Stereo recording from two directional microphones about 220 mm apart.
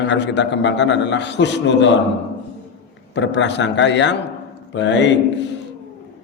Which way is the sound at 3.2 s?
55° left (ahead or behind).